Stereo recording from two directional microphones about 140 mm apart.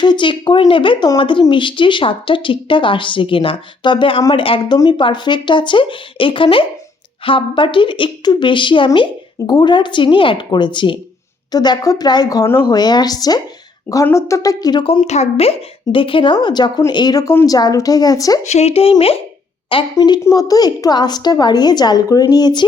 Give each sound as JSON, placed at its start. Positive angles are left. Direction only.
{"t": 0.0, "sound": "speech", "side_deg": 35}
{"t": 14.8, "sound": "speech", "side_deg": 45}
{"t": 18.4, "sound": "speech", "side_deg": 50}
{"t": 20.0, "sound": "speech", "side_deg": 25}